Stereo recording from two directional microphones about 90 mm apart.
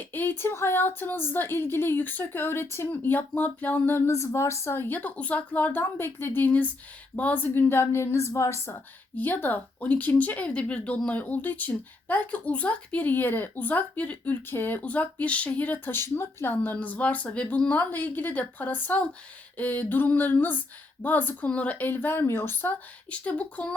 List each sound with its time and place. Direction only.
0.0 s speech: 20° left (ahead or behind)
9.1 s speech: 20° left (ahead or behind)